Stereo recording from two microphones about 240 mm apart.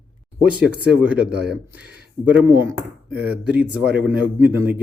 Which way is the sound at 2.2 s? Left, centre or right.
Centre.